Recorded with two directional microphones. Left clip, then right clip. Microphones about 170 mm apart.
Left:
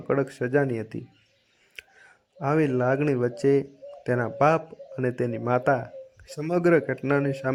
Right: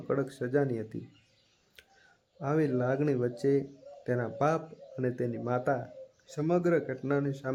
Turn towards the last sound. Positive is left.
turn(degrees=25)  # may be behind; listen again after turning